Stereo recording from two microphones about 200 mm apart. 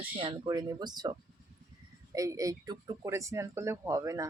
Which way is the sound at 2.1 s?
15° right (ahead or behind).